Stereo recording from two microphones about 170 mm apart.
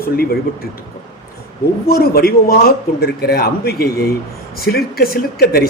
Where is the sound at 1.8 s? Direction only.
65° left (ahead or behind).